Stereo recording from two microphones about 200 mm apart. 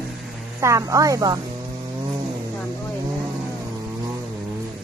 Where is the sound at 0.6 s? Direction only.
15° right (ahead or behind).